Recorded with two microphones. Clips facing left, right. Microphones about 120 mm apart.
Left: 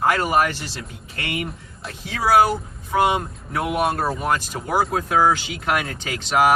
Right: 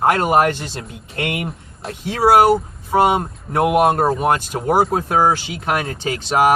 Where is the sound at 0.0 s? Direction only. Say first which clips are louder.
Right 4 dB; 35° right (ahead or behind).